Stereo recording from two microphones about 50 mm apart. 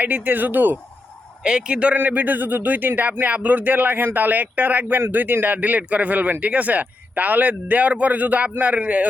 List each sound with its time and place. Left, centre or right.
0.0 s speech: right
1.5 s a man's voice: centre
2.0 s speech: right